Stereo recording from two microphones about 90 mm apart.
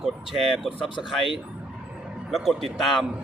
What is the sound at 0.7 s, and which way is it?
Speech, 65° left (ahead or behind).